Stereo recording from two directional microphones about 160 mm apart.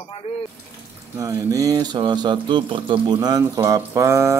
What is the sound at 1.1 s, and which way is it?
Speech, 20° right (ahead or behind).